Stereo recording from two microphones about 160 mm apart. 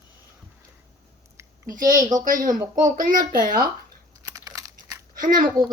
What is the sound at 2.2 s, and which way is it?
Speech, 55° right (ahead or behind).